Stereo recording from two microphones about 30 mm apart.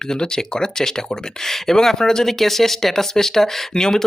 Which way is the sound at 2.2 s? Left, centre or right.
Centre.